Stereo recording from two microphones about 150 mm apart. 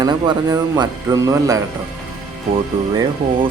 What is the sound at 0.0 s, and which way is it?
Speech, 25° right (ahead or behind).